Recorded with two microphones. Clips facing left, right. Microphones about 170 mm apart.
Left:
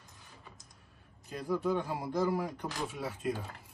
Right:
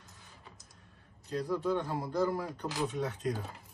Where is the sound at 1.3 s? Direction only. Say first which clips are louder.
Even; 10° left (ahead or behind).